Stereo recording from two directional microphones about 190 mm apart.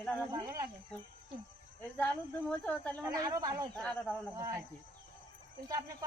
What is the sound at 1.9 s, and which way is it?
Speech, 10° left (ahead or behind).